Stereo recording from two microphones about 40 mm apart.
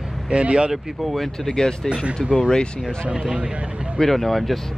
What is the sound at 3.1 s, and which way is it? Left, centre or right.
Speech, right.